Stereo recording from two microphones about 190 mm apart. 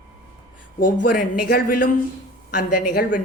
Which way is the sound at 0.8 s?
50° left (ahead or behind).